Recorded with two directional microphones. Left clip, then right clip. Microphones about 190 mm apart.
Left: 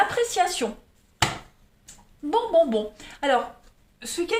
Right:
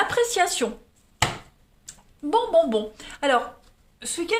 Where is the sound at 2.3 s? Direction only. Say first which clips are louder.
Right 1 dB; 35° right (ahead or behind).